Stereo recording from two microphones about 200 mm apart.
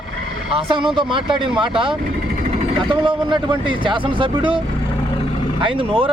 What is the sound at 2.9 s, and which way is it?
Speech, 25° right (ahead or behind).